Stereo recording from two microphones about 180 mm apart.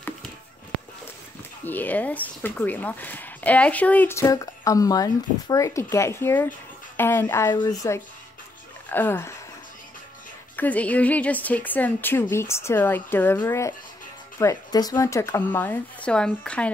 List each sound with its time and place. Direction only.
1.6 s speech: 10° left (ahead or behind)
10.5 s speech: 10° left (ahead or behind)